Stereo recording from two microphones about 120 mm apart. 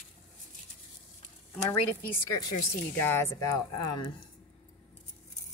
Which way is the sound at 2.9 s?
15° left (ahead or behind).